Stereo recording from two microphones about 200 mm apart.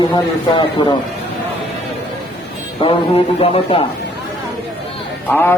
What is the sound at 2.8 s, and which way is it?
Speech, 25° left (ahead or behind).